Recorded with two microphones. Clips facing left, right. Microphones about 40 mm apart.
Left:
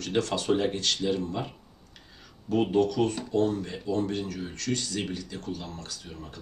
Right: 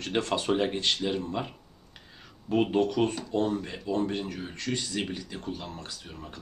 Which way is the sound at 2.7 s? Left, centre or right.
Right.